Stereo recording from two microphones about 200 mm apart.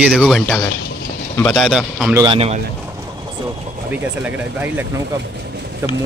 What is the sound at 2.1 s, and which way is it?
Speech, 25° right (ahead or behind).